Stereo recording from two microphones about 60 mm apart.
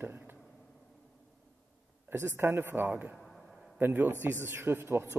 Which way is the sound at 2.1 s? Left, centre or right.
Right.